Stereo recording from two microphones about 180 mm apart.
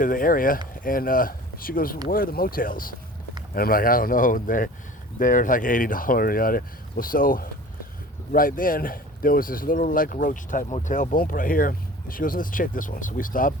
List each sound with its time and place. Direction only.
0.0 s speech: 50° left (ahead or behind)